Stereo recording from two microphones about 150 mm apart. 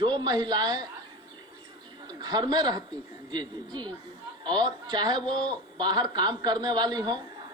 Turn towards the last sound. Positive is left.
turn(degrees=-30)  # may be behind; listen again after turning